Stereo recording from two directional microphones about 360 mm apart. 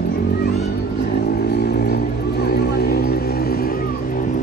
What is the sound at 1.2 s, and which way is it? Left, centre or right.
Vehicle, left.